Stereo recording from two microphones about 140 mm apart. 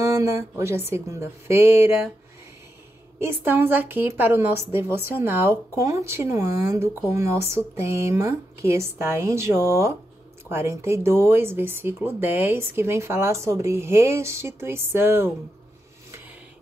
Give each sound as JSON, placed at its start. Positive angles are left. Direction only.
{"t": 0.0, "sound": "speech", "side_deg": -20}
{"t": 3.2, "sound": "a woman's voice", "side_deg": -15}